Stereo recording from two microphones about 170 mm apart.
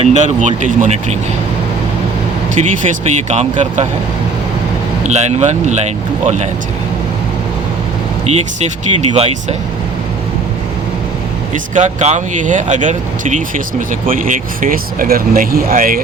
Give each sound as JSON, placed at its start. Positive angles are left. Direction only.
{"t": 0.0, "sound": "speech", "side_deg": -40}
{"t": 3.1, "sound": "speech", "side_deg": -40}
{"t": 5.0, "sound": "speech", "side_deg": -40}
{"t": 8.3, "sound": "speech", "side_deg": -40}
{"t": 11.5, "sound": "speech", "side_deg": -50}